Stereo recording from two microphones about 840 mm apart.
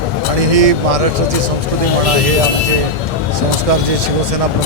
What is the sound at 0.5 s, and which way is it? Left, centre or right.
Speech, right.